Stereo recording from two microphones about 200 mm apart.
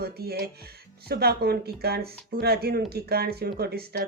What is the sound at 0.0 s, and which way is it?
Speech, 50° right (ahead or behind).